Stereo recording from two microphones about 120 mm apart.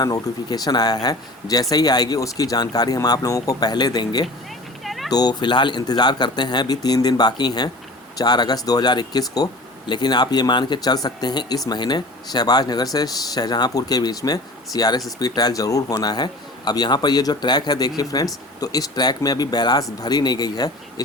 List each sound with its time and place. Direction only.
0.0 s speech: 35° left (ahead or behind)
4.8 s a sound: centre (ahead or behind)
5.1 s speech: 35° left (ahead or behind)